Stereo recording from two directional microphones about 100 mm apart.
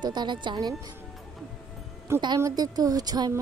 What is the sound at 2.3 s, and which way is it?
A woman's voice, 35° right (ahead or behind).